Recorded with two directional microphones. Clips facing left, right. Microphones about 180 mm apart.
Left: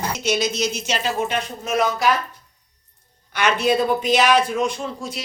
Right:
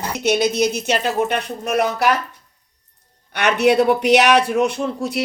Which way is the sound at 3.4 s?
65° right (ahead or behind).